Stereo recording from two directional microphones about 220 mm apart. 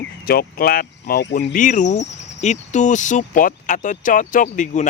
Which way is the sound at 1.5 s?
35° left (ahead or behind).